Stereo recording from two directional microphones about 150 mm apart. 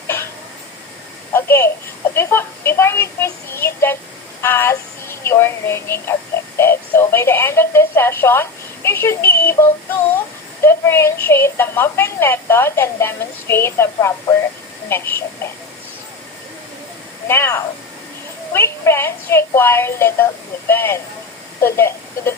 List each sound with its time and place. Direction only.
1.3 s a sound: 15° left (ahead or behind)
2.1 s a woman's voice: 15° left (ahead or behind)
17.2 s a woman's voice: 15° left (ahead or behind)